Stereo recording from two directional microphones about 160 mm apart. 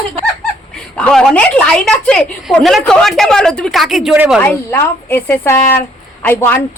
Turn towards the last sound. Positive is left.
turn(degrees=10)  # may be behind; listen again after turning